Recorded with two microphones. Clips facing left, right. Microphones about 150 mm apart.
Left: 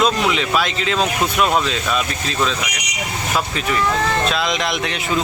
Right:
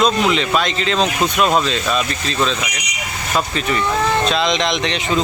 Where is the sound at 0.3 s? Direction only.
5° left (ahead or behind).